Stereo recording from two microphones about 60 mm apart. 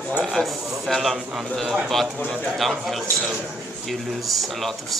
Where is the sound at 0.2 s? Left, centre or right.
Centre.